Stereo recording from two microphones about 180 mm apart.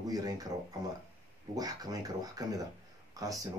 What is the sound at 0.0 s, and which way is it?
Speech, 20° right (ahead or behind).